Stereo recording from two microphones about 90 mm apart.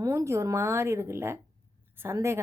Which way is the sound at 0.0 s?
35° right (ahead or behind).